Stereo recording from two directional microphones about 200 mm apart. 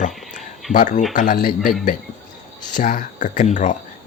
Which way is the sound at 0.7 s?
40° left (ahead or behind).